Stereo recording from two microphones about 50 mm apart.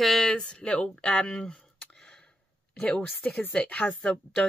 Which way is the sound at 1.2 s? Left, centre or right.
Centre.